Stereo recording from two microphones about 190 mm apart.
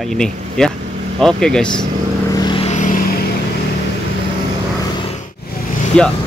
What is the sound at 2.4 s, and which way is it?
Vehicle, 25° left (ahead or behind).